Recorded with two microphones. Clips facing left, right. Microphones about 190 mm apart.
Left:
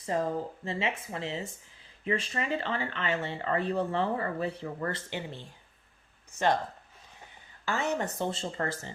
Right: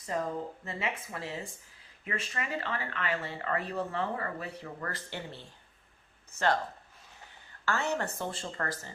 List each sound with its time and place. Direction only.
0.0 s speech: 30° left (ahead or behind)
7.6 s speech: 15° left (ahead or behind)